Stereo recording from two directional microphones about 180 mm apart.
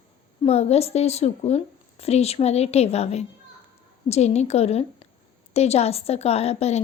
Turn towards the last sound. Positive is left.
turn(degrees=35)  # may be behind; listen again after turning